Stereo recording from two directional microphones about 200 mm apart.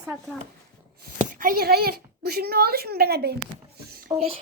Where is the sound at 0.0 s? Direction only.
5° right (ahead or behind).